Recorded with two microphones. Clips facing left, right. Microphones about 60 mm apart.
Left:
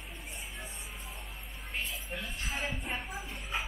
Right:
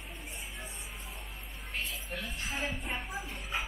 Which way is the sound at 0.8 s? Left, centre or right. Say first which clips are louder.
Even; centre.